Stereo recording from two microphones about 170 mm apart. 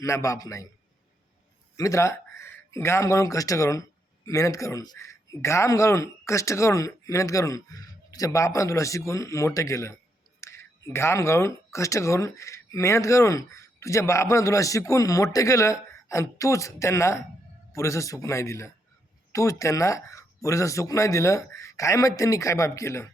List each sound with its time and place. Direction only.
0.0 s a man's voice: 20° left (ahead or behind)
1.7 s speech: 15° left (ahead or behind)